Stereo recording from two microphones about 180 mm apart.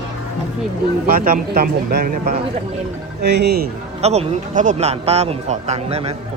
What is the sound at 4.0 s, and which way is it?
Speech, 35° right (ahead or behind).